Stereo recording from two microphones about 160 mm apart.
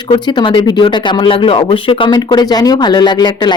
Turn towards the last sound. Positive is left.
turn(degrees=25)  # may be behind; listen again after turning